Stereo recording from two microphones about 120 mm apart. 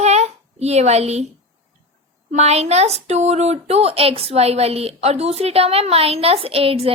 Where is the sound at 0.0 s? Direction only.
65° right (ahead or behind).